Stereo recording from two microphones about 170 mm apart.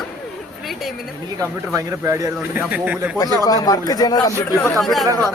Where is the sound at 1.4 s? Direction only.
20° right (ahead or behind).